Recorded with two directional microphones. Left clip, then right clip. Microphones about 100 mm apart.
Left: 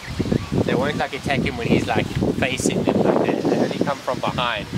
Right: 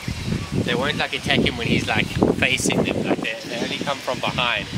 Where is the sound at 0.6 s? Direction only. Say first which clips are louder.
Right 1 dB; 30° right (ahead or behind).